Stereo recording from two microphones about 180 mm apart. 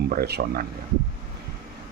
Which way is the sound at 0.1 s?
60° right (ahead or behind).